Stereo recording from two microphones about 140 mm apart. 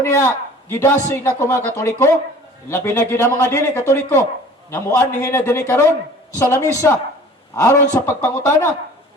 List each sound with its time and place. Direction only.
0.0 s a man's voice: 20° left (ahead or behind)